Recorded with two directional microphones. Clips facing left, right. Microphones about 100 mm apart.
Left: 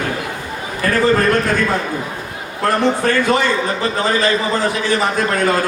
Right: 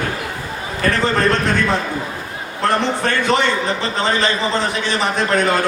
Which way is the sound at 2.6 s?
25° right (ahead or behind).